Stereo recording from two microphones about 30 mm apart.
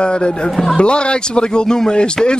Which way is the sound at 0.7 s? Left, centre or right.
Left.